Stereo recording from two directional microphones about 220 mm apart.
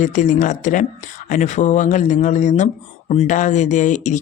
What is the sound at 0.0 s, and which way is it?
Speech, 35° left (ahead or behind).